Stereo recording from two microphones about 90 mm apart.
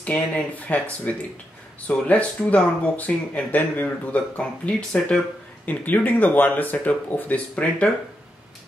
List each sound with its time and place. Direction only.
0.0 s speech: 10° left (ahead or behind)